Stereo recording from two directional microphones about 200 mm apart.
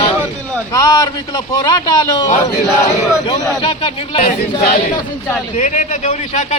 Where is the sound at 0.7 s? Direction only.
20° left (ahead or behind).